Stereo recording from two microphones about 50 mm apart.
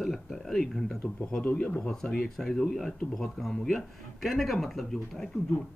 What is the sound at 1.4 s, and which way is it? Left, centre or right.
Speech, left.